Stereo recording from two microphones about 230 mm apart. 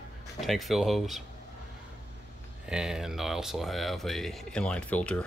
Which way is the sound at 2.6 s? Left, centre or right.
Centre.